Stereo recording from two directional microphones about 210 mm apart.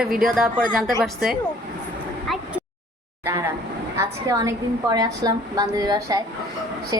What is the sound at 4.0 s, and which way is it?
A woman's voice, 15° right (ahead or behind).